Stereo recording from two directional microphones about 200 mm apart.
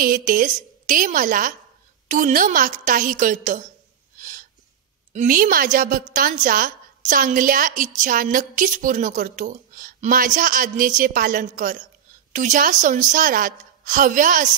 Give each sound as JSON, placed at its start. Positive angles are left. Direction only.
{"t": 0.0, "sound": "a woman's voice", "side_deg": -45}
{"t": 4.2, "sound": "gasp", "side_deg": -40}
{"t": 5.1, "sound": "a woman's voice", "side_deg": -45}